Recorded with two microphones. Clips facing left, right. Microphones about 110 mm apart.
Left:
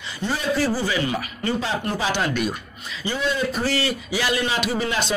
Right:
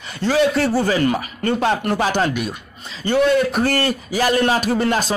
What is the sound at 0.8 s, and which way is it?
A man's voice, 45° right (ahead or behind).